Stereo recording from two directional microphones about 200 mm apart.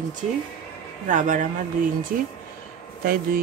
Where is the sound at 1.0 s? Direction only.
40° right (ahead or behind).